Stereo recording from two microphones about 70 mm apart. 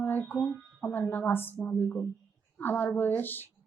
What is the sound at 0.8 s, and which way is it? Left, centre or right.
A woman's voice, left.